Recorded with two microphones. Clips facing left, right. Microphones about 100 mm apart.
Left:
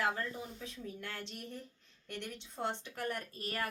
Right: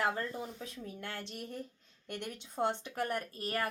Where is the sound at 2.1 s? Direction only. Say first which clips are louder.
Right 2 dB; 55° right (ahead or behind).